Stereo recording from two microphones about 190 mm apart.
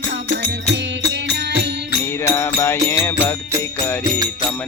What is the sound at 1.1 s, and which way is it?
Music, 60° right (ahead or behind).